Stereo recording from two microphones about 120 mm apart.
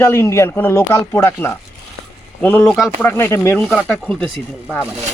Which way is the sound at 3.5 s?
10° left (ahead or behind).